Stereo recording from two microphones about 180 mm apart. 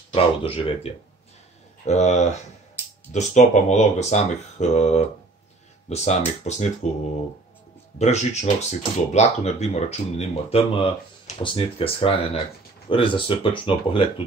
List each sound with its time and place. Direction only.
0.1 s speech: 30° left (ahead or behind)
8.0 s speech: 40° left (ahead or behind)